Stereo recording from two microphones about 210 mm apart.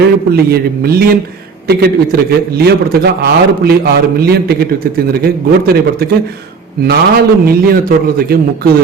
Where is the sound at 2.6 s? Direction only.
50° right (ahead or behind).